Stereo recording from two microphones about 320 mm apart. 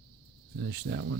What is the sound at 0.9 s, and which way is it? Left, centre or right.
Speech, right.